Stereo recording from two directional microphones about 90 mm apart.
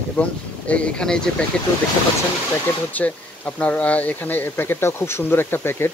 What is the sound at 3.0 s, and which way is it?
Speech, 20° left (ahead or behind).